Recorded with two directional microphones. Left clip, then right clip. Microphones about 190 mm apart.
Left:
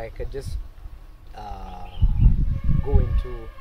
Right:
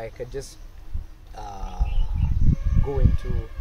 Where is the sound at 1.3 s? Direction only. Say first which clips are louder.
Even; 10° left (ahead or behind).